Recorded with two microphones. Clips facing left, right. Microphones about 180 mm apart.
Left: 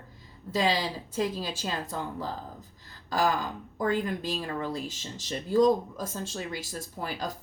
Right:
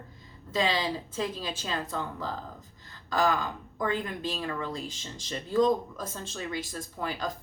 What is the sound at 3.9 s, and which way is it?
Speech, 40° left (ahead or behind).